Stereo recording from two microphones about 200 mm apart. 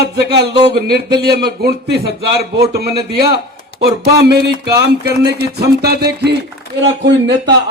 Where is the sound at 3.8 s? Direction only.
55° right (ahead or behind).